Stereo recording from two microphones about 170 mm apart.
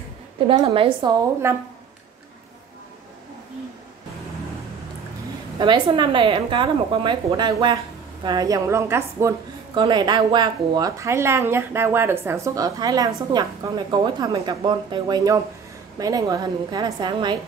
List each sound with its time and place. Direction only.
0.5 s speech: 30° right (ahead or behind)
5.6 s speech: 30° right (ahead or behind)